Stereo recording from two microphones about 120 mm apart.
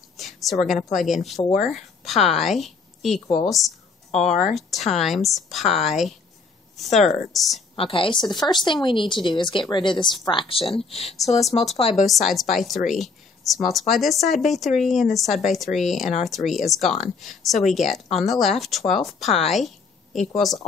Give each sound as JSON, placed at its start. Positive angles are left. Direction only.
{"t": 0.2, "sound": "a sound", "side_deg": 0}
{"t": 0.9, "sound": "speech", "side_deg": 0}
{"t": 1.3, "sound": "speech", "side_deg": 65}
{"t": 1.7, "sound": "a woman's voice", "side_deg": 0}
{"t": 4.3, "sound": "speech", "side_deg": 75}
{"t": 4.6, "sound": "speech", "side_deg": 0}
{"t": 7.7, "sound": "speech", "side_deg": 50}
{"t": 12.1, "sound": "speech", "side_deg": 0}
{"t": 19.5, "sound": "a sound", "side_deg": 0}
{"t": 20.3, "sound": "speech", "side_deg": 0}